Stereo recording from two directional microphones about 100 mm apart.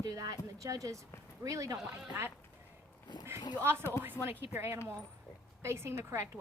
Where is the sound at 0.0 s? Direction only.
35° right (ahead or behind).